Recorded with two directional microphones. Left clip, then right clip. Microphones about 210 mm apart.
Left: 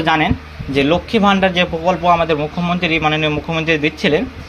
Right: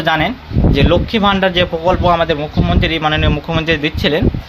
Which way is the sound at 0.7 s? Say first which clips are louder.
Even; 10° right (ahead or behind).